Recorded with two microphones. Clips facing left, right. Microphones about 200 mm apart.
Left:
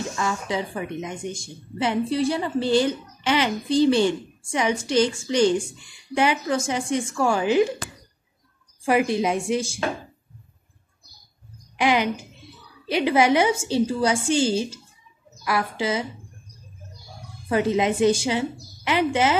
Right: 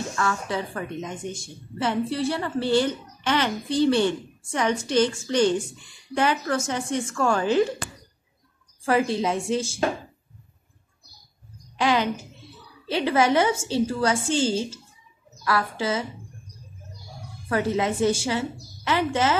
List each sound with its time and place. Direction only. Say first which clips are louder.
0.1 s a woman's voice: left 1 dB; 15° left (ahead or behind)
8.8 s a woman's voice: left 2 dB; 15° left (ahead or behind)
11.7 s a woman's voice: left 1 dB; 15° left (ahead or behind)
17.5 s a woman's voice: left 3 dB; 15° left (ahead or behind)